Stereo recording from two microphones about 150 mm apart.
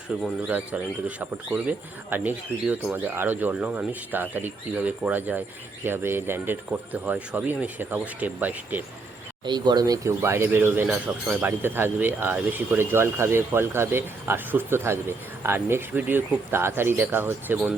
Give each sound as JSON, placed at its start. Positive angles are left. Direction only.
{"t": 0.1, "sound": "speech", "side_deg": -10}
{"t": 9.5, "sound": "speech", "side_deg": -30}